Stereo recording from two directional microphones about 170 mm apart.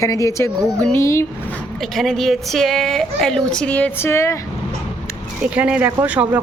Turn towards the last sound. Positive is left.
turn(degrees=-10)  # may be behind; listen again after turning